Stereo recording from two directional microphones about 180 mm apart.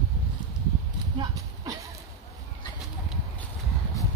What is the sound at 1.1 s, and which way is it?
Clip-clop, 20° right (ahead or behind).